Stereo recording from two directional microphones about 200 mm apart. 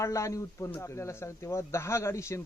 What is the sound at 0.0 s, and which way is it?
Speech, 15° left (ahead or behind).